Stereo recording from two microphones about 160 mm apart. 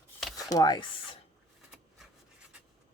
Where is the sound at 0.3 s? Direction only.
20° left (ahead or behind).